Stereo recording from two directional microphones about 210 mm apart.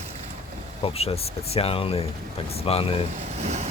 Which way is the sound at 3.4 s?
30° right (ahead or behind).